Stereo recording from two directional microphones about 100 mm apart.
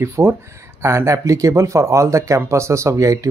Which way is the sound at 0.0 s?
25° right (ahead or behind).